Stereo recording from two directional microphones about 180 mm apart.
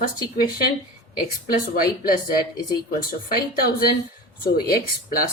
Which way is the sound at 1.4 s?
50° left (ahead or behind).